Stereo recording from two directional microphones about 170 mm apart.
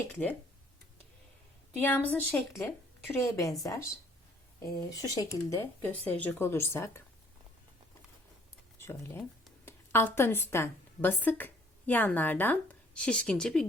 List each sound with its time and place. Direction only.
1.8 s speech: 10° left (ahead or behind)
8.8 s a woman's voice: 15° left (ahead or behind)